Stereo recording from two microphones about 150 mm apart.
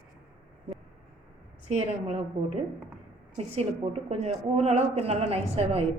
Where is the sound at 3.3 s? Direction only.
45° right (ahead or behind).